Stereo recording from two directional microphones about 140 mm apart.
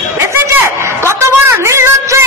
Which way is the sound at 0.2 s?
20° right (ahead or behind).